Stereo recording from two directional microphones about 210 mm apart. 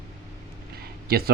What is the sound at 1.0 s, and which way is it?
Speech, 45° right (ahead or behind).